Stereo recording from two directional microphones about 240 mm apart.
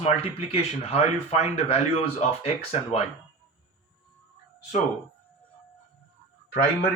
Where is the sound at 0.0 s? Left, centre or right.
Left.